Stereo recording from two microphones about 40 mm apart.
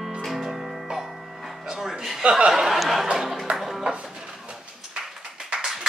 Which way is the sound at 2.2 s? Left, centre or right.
Right.